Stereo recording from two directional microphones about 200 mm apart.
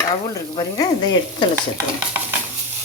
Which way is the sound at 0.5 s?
20° left (ahead or behind).